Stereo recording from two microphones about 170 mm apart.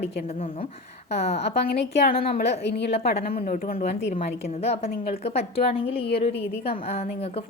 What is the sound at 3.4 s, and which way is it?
A woman's voice, 55° left (ahead or behind).